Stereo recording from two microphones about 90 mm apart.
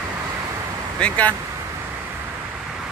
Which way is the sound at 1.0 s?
15° left (ahead or behind).